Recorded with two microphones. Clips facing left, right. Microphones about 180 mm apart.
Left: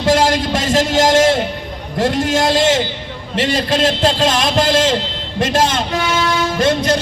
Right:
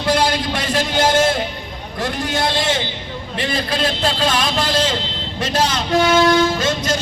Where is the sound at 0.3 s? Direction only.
45° left (ahead or behind).